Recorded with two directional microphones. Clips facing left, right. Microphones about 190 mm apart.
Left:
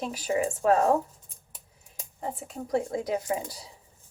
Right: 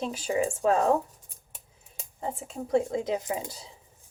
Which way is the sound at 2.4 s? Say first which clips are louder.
Right 3 dB; 25° right (ahead or behind).